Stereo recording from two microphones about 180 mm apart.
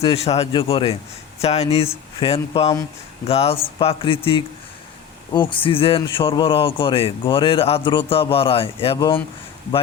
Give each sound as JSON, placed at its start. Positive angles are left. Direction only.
{"t": 0.0, "sound": "speech", "side_deg": 35}